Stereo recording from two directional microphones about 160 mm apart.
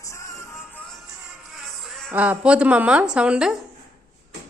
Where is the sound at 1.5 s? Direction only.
Centre (ahead or behind).